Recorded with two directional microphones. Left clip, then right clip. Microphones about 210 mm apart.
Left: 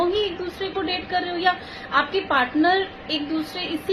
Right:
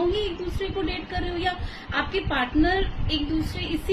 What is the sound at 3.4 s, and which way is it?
Speech, 15° right (ahead or behind).